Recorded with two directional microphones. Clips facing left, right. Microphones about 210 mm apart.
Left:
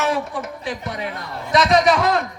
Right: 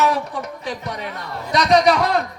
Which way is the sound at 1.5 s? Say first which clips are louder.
Even; 40° right (ahead or behind).